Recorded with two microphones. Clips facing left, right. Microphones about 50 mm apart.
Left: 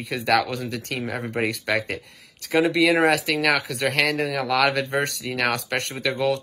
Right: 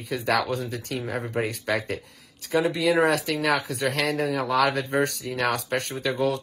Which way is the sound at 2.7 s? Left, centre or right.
Left.